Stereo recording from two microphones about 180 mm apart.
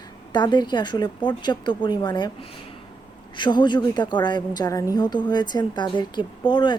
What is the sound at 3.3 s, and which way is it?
A woman's voice, 25° left (ahead or behind).